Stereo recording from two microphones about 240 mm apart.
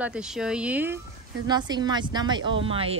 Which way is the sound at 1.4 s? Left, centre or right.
Centre.